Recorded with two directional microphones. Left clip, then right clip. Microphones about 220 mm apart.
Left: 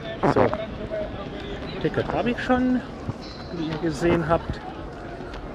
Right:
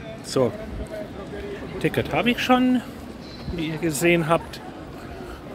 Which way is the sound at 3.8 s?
35° right (ahead or behind).